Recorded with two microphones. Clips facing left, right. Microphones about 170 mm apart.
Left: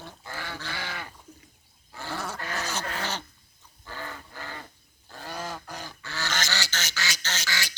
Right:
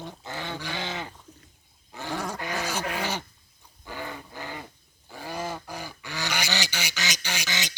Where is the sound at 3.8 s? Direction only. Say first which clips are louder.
Right 3 dB; 15° right (ahead or behind).